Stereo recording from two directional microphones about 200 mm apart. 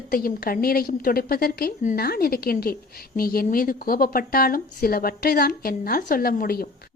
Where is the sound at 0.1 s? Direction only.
45° left (ahead or behind).